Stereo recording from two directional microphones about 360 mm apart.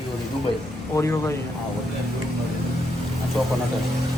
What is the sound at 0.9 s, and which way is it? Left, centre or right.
Speech, centre.